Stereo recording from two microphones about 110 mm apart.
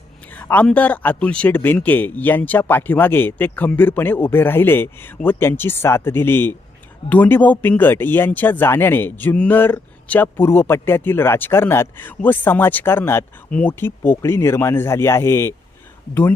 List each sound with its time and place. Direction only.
0.3 s a man's voice: 15° left (ahead or behind)